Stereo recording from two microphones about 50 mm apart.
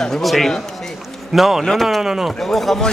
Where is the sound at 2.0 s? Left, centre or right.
Centre.